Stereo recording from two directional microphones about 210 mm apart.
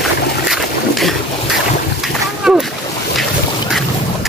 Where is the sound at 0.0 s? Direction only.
Centre (ahead or behind).